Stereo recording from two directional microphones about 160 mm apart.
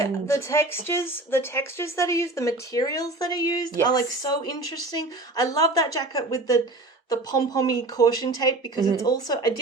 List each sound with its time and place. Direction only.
0.0 s speech: 20° left (ahead or behind)
5.4 s speech: 25° left (ahead or behind)